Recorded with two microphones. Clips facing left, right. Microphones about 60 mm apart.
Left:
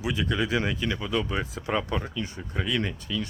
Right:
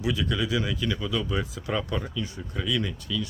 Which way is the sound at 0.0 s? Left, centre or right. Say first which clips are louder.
Even; left.